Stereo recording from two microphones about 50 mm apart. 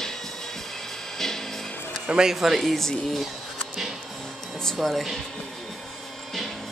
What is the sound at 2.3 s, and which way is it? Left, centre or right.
Speech, centre.